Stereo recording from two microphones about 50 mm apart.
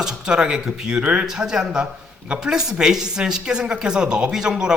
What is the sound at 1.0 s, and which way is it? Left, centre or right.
Speech, right.